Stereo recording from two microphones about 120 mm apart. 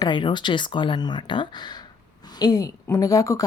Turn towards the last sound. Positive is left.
turn(degrees=30)  # may be behind; listen again after turning